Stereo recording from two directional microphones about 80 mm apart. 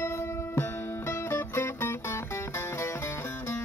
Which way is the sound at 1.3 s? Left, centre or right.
Left.